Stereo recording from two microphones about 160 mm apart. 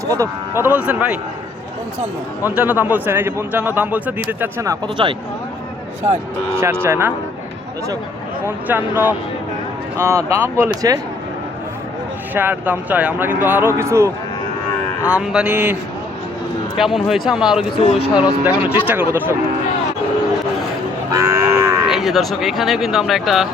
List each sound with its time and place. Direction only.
0.1 s a man's voice: 15° right (ahead or behind)
2.6 s a man's voice: 10° right (ahead or behind)
6.8 s a man's voice: 15° right (ahead or behind)
8.4 s a man's voice: 10° right (ahead or behind)
12.3 s a man's voice: 10° right (ahead or behind)
15.0 s a man's voice: 5° right (ahead or behind)
17.7 s speech: 30° left (ahead or behind)
18.1 s a man's voice: 10° right (ahead or behind)
21.1 s livestock: 20° right (ahead or behind)
21.8 s speech: centre (ahead or behind)